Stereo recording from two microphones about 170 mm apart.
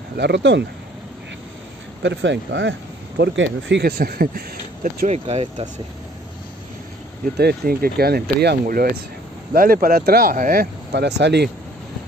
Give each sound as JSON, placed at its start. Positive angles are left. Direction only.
{"t": 0.2, "sound": "speech", "side_deg": -90}
{"t": 2.0, "sound": "speech", "side_deg": -90}
{"t": 4.8, "sound": "speech", "side_deg": -40}
{"t": 7.3, "sound": "speech", "side_deg": -65}